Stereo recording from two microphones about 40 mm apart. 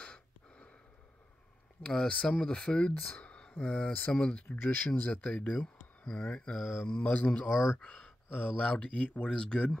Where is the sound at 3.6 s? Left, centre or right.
Left.